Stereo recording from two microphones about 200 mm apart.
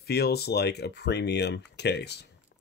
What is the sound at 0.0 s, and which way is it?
Speech, 55° left (ahead or behind).